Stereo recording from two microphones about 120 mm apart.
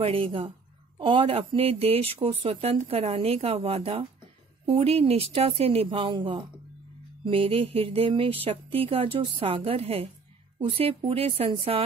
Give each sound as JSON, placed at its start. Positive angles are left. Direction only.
{"t": 0.0, "sound": "speech", "side_deg": -50}